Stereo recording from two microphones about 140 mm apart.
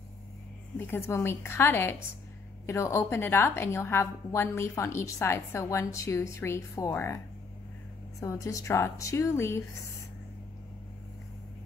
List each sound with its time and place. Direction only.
0.7 s a woman's voice: 15° left (ahead or behind)
8.2 s a woman's voice: 25° left (ahead or behind)